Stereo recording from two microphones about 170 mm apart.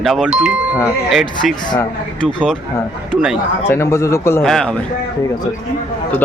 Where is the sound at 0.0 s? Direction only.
Centre (ahead or behind).